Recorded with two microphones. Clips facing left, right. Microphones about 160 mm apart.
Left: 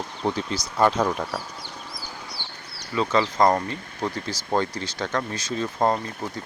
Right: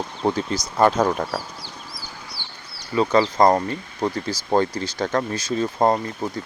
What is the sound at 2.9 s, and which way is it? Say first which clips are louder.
Speech: right 4 dB; 40° right (ahead or behind).